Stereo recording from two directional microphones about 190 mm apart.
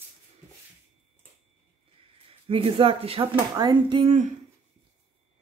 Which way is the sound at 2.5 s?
30° right (ahead or behind).